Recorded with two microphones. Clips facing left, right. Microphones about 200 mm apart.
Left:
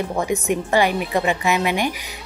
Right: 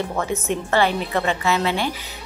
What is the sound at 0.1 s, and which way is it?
A woman's voice, 15° left (ahead or behind).